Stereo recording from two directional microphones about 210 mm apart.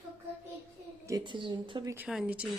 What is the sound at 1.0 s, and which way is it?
Speech, 20° right (ahead or behind).